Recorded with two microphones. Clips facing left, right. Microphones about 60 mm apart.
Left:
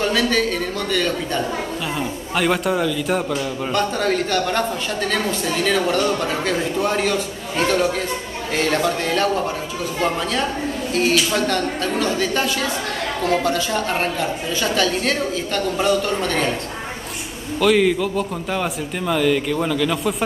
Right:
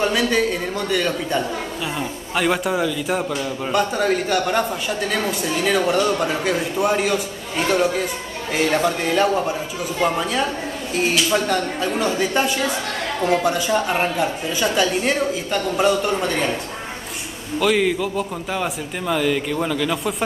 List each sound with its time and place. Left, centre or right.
0.0 s a man's voice: centre
2.0 s a man's voice: centre
17.6 s a man's voice: centre